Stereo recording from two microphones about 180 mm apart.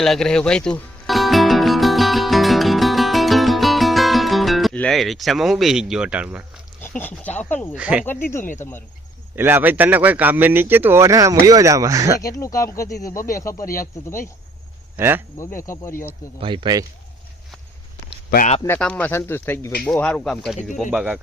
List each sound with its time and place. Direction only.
0.0 s music: 5° left (ahead or behind)
6.8 s speech: 10° left (ahead or behind)
7.8 s speech: 5° right (ahead or behind)
8.0 s speech: 10° left (ahead or behind)
9.3 s speech: 10° right (ahead or behind)
12.2 s speech: 20° left (ahead or behind)
14.9 s speech: 10° right (ahead or behind)
15.6 s speech: 15° left (ahead or behind)
16.4 s speech: 30° right (ahead or behind)
18.6 s speech: 10° left (ahead or behind)